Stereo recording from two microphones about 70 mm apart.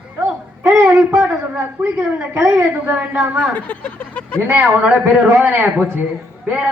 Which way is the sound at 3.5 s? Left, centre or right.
Left.